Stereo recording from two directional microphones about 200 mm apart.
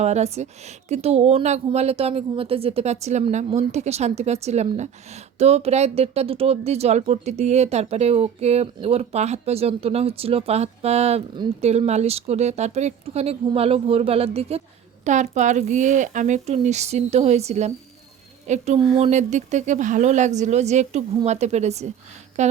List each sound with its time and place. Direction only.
0.0 s speech: 35° right (ahead or behind)